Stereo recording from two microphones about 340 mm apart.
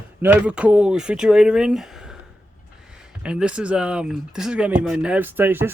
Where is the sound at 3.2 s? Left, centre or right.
Centre.